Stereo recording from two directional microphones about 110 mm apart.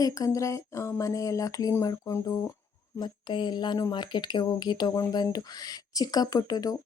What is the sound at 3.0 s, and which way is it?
Speech, 45° left (ahead or behind).